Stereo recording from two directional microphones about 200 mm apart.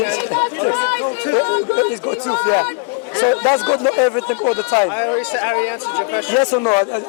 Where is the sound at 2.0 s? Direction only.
25° left (ahead or behind).